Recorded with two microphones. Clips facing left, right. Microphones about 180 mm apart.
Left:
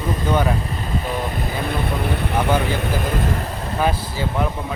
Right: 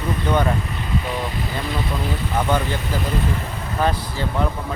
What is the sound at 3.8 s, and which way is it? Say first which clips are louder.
Speech: even; 10° left (ahead or behind).